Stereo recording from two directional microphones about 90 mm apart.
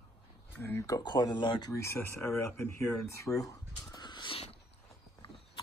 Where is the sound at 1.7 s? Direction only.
30° left (ahead or behind).